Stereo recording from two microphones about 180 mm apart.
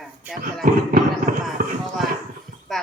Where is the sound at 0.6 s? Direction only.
50° right (ahead or behind).